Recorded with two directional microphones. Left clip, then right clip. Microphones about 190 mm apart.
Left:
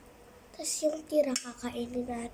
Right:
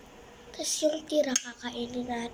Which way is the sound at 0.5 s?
10° left (ahead or behind).